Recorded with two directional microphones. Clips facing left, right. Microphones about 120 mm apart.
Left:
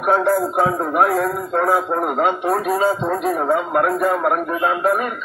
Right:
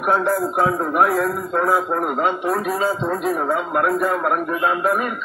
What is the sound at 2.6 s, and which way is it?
A man's voice, 20° left (ahead or behind).